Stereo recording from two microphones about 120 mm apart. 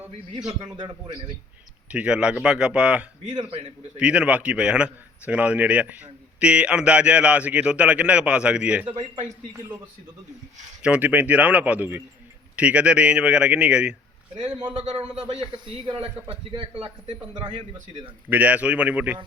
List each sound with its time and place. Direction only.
0.3 s a man's voice: 35° right (ahead or behind)
1.9 s a man's voice: 10° right (ahead or behind)
3.2 s a man's voice: 35° right (ahead or behind)
3.9 s a man's voice: 10° right (ahead or behind)
10.8 s a man's voice: 10° right (ahead or behind)
14.3 s a man's voice: 65° right (ahead or behind)
15.5 s a man's voice: 40° right (ahead or behind)
16.3 s a man's voice: 55° right (ahead or behind)
18.3 s a man's voice: 10° right (ahead or behind)